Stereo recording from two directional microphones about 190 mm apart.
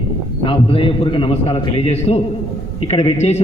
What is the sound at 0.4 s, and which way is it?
A man's voice, 30° left (ahead or behind).